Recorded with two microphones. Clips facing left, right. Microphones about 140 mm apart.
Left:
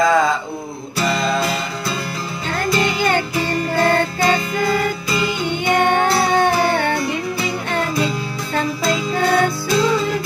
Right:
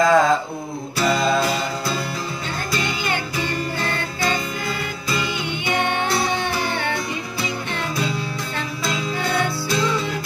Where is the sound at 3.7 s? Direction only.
45° left (ahead or behind).